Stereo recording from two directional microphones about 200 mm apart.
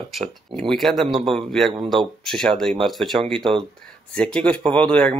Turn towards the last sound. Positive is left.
turn(degrees=5)  # may be behind; listen again after turning